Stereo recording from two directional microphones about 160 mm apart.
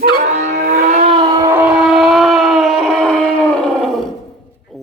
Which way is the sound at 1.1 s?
25° right (ahead or behind).